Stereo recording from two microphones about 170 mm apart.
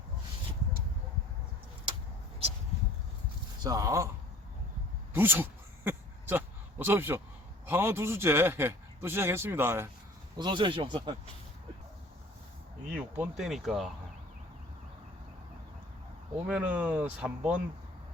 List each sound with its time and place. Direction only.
3.6 s speech: 20° right (ahead or behind)
5.1 s a sound: 15° right (ahead or behind)
7.7 s a man's voice: 15° right (ahead or behind)
10.3 s speech: 25° right (ahead or behind)
13.1 s speech: 5° right (ahead or behind)
16.5 s a man's voice: 10° right (ahead or behind)